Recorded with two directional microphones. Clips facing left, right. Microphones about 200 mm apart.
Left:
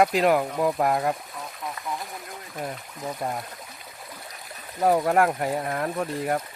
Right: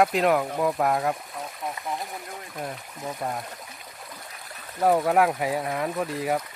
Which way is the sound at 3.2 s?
Centre (ahead or behind).